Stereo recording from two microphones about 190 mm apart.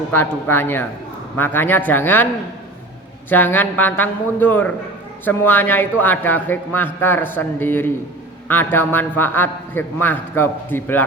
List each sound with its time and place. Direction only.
0.1 s a man's voice: 10° left (ahead or behind)
3.2 s a man's voice: 10° left (ahead or behind)